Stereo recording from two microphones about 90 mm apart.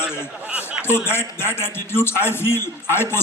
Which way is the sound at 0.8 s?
25° left (ahead or behind).